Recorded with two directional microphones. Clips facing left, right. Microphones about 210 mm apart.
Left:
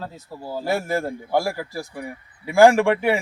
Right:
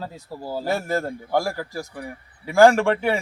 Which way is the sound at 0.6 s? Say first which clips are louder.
Left 1 dB; 10° left (ahead or behind).